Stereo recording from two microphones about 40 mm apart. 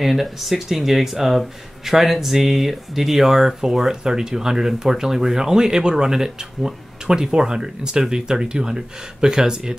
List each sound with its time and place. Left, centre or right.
0.0 s speech: centre